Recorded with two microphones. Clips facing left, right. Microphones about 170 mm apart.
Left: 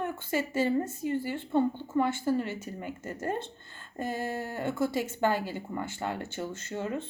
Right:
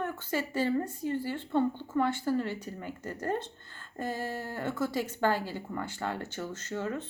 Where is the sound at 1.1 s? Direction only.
10° left (ahead or behind); by 6.6 s 25° left (ahead or behind).